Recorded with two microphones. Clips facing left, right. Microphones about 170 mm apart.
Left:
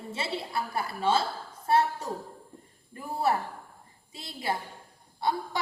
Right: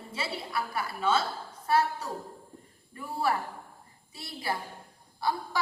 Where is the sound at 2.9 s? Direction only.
25° left (ahead or behind).